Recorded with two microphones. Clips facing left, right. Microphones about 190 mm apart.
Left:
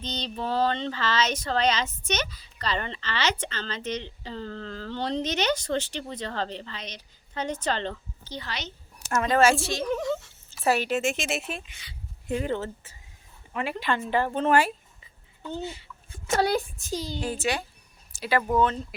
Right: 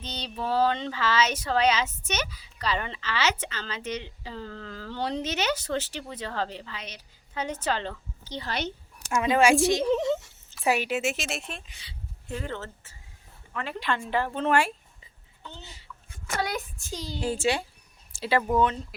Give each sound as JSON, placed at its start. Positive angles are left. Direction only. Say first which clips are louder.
{"t": 0.0, "sound": "speech", "louder": "left 2 dB", "side_deg": -10}
{"t": 8.4, "sound": "speech", "louder": "right 7 dB", "side_deg": -55}
{"t": 9.0, "sound": "a child's voice", "louder": "even", "side_deg": -10}
{"t": 11.6, "sound": "speech", "louder": "left 1 dB", "side_deg": -35}
{"t": 12.3, "sound": "a woman's voice", "louder": "left 6 dB", "side_deg": 15}
{"t": 13.7, "sound": "speech", "louder": "left 1 dB", "side_deg": 0}
{"t": 16.0, "sound": "a woman's voice", "louder": "left 6 dB", "side_deg": 30}
{"t": 16.7, "sound": "speech", "louder": "left 6 dB", "side_deg": 15}
{"t": 17.2, "sound": "a child's voice", "louder": "right 5 dB", "side_deg": -25}